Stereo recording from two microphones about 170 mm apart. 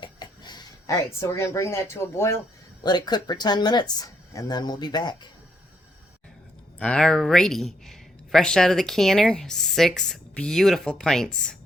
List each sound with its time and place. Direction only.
0.0 s speech: 25° left (ahead or behind)
6.7 s speech: 5° left (ahead or behind)